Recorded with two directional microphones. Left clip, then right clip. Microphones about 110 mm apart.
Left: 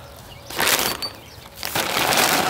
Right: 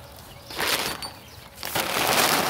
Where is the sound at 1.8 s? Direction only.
Centre (ahead or behind).